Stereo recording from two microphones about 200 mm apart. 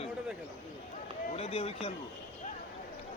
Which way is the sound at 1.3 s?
30° left (ahead or behind).